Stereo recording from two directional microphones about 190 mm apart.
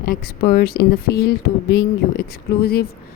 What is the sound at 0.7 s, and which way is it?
A woman's voice, 65° left (ahead or behind).